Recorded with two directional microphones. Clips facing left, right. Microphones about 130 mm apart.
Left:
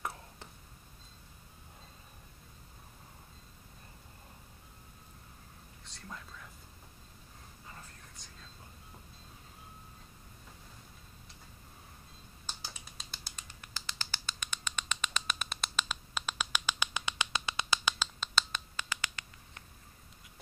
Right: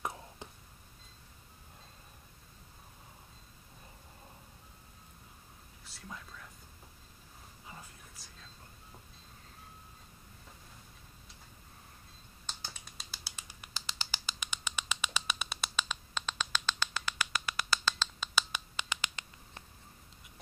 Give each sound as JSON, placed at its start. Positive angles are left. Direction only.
{"t": 0.0, "sound": "whispering", "side_deg": -15}
{"t": 5.9, "sound": "whispering", "side_deg": -5}
{"t": 8.2, "sound": "whispering", "side_deg": -5}
{"t": 12.4, "sound": "finger snapping", "side_deg": 5}
{"t": 18.2, "sound": "a sound", "side_deg": -5}
{"t": 18.8, "sound": "scratch", "side_deg": -20}